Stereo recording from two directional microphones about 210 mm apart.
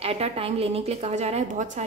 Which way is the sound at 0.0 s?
30° right (ahead or behind).